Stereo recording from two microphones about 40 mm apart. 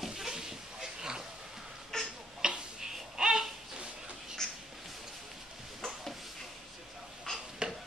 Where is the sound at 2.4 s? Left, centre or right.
Centre.